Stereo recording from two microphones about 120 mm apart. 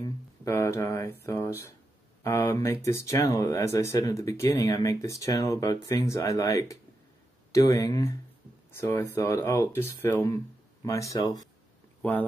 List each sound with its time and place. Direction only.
0.5 s speech: 20° left (ahead or behind)
12.0 s speech: 15° left (ahead or behind)